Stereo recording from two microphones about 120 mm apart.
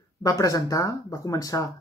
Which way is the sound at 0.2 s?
30° left (ahead or behind).